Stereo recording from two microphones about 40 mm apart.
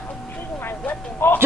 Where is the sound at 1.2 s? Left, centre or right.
Left.